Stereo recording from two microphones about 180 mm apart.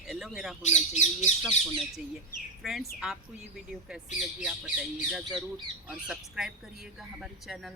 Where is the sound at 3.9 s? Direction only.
5° right (ahead or behind).